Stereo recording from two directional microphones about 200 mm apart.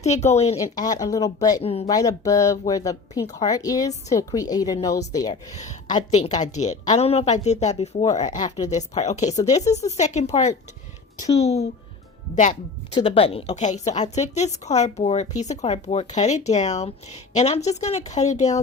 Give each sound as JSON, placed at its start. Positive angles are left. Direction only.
{"t": 0.0, "sound": "a woman's voice", "side_deg": 35}
{"t": 0.5, "sound": "speech", "side_deg": 20}
{"t": 1.6, "sound": "speech", "side_deg": 30}
{"t": 1.9, "sound": "speech", "side_deg": 20}
{"t": 5.5, "sound": "a woman's voice", "side_deg": 35}
{"t": 8.4, "sound": "speech", "side_deg": 20}
{"t": 8.7, "sound": "a woman's voice", "side_deg": 35}
{"t": 13.0, "sound": "a woman's voice", "side_deg": 25}